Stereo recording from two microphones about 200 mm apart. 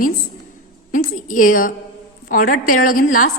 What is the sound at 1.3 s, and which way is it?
A woman's voice, 40° left (ahead or behind).